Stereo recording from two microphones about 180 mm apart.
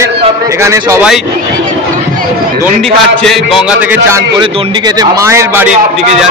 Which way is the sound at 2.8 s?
Centre (ahead or behind).